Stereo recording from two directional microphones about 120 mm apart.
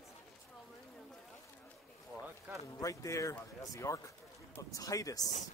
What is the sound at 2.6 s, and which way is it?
Speech, 30° left (ahead or behind).